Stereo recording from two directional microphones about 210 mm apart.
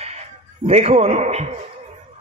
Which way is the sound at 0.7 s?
30° right (ahead or behind).